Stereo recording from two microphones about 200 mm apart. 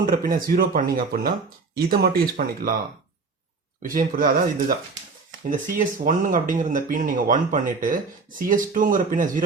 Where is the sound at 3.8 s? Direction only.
45° right (ahead or behind).